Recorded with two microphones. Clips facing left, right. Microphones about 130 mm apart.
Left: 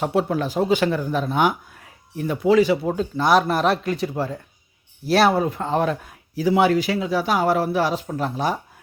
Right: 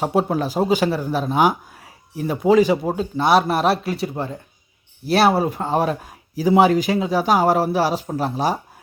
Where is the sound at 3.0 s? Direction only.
5° right (ahead or behind).